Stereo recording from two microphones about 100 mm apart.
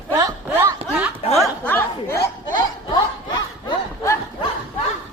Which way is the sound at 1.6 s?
20° left (ahead or behind).